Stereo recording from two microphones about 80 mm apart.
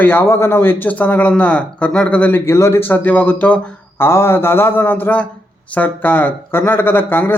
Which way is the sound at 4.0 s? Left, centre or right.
Left.